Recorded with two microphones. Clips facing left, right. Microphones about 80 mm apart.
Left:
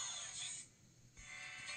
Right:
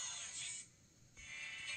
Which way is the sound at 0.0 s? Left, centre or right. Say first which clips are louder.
Left 1 dB; left.